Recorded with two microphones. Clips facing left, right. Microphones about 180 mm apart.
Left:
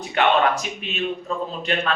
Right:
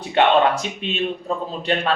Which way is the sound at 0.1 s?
30° right (ahead or behind).